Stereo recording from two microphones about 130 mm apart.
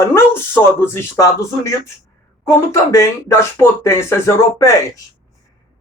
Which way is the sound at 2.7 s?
20° left (ahead or behind).